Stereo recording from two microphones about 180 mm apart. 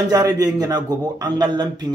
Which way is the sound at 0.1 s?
20° right (ahead or behind).